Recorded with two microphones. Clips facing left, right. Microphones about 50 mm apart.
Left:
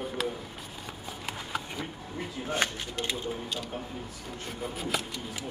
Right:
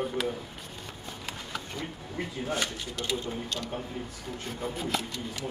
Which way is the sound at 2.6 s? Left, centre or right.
Left.